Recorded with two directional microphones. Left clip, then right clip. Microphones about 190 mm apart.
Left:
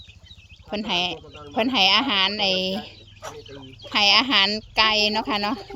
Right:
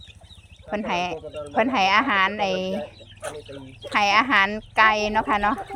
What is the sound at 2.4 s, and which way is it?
Speech, 20° right (ahead or behind).